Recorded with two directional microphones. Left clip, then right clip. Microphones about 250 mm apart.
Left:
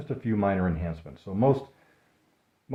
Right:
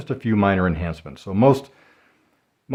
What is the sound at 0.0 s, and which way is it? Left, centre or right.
Speech, right.